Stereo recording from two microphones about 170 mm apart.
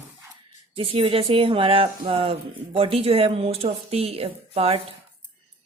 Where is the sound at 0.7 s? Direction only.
35° right (ahead or behind).